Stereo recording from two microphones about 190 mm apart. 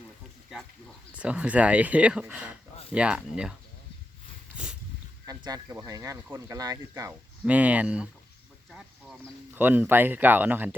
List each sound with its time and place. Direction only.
1.1 s speech: 5° right (ahead or behind)
4.5 s a sound: 5° right (ahead or behind)
5.2 s speech: 20° right (ahead or behind)
7.4 s speech: 5° right (ahead or behind)
9.6 s speech: 10° right (ahead or behind)